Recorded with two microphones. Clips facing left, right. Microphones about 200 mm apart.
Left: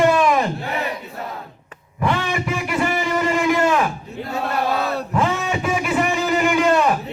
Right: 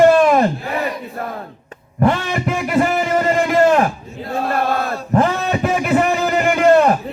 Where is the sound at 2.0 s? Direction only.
45° right (ahead or behind).